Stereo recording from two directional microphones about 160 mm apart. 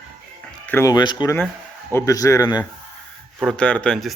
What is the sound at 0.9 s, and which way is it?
Speech, 25° left (ahead or behind).